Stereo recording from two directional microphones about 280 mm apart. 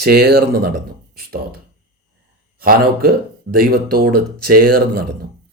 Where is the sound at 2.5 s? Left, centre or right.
Right.